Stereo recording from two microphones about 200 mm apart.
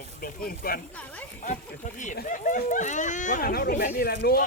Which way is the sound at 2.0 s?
40° left (ahead or behind).